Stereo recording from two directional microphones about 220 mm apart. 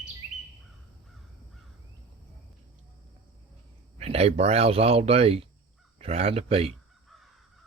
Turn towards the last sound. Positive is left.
turn(degrees=-25)  # may be behind; listen again after turning